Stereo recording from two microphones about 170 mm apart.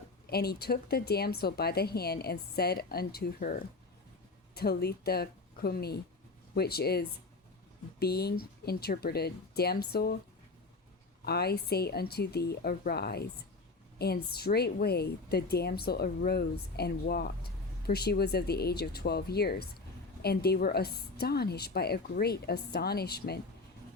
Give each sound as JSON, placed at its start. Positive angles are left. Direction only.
{"t": 0.3, "sound": "a woman's voice", "side_deg": 70}
{"t": 11.3, "sound": "a woman's voice", "side_deg": 70}